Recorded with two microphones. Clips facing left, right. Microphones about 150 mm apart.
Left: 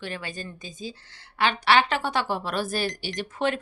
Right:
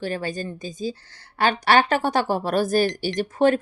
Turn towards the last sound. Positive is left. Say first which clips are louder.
# right 8 dB
turn(degrees=-40)  # may be behind; listen again after turning